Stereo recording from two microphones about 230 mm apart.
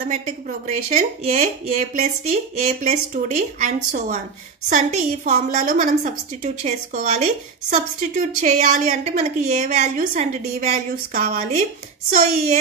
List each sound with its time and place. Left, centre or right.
0.7 s a woman's voice: right